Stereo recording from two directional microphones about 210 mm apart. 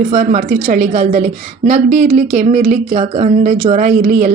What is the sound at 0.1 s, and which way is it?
Speech, 40° right (ahead or behind).